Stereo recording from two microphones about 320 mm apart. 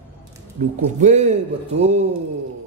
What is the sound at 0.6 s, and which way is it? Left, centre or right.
A man's voice, right.